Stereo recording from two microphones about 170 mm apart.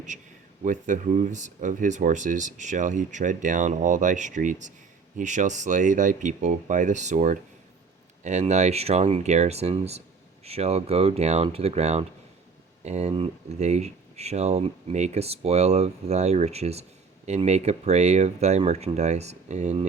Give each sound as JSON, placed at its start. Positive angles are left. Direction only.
{"t": 0.6, "sound": "speech", "side_deg": -50}